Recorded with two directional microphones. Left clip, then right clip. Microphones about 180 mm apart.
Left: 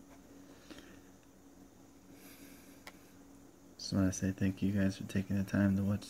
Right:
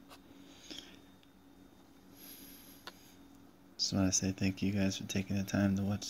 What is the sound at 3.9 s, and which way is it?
Speech, 20° left (ahead or behind).